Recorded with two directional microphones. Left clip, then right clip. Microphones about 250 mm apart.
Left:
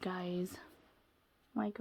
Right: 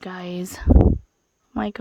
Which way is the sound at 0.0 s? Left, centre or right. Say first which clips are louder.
Right 8 dB; right.